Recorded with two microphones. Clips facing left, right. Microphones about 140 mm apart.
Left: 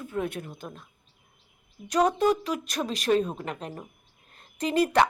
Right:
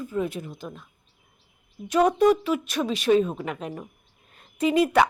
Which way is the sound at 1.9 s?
5° right (ahead or behind).